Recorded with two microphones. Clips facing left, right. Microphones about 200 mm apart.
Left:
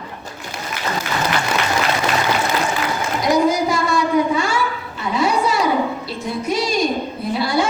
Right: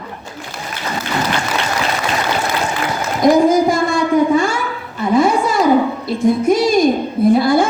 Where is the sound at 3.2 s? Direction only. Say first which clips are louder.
Right 6 dB; 50° right (ahead or behind).